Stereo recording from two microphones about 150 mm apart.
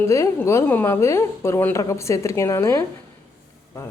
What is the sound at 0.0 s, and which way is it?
A woman's voice, 20° left (ahead or behind).